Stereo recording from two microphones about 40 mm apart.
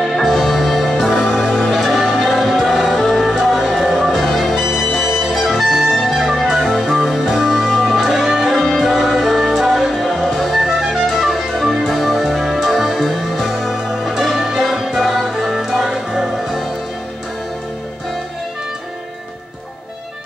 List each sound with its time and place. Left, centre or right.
0.0 s music: centre
1.7 s music: centre
4.2 s music: centre